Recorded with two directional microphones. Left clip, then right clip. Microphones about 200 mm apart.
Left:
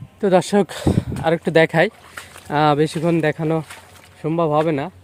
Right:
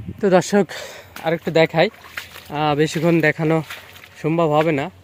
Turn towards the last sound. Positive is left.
turn(degrees=0)  # may be behind; listen again after turning